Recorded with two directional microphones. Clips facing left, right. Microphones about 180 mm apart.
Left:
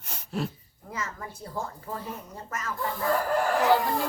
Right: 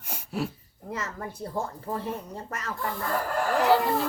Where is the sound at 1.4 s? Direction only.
35° right (ahead or behind).